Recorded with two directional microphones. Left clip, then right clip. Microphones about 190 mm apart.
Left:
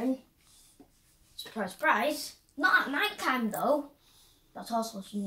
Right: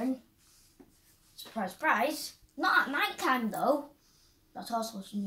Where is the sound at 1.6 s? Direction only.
Centre (ahead or behind).